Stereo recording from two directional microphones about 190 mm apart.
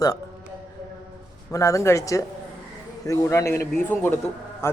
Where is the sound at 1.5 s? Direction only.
15° left (ahead or behind).